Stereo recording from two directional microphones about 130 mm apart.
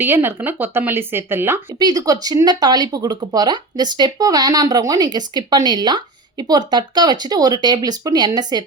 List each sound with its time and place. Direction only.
0.0 s speech: 15° right (ahead or behind)
1.8 s speech: 30° right (ahead or behind)